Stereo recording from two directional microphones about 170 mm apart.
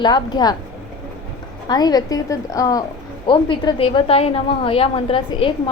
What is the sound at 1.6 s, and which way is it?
A woman's voice, 25° left (ahead or behind).